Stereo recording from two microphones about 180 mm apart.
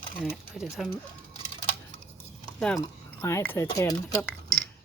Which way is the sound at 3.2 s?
15° left (ahead or behind).